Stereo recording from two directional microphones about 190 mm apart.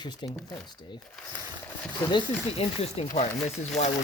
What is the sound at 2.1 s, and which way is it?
Speech, 30° left (ahead or behind).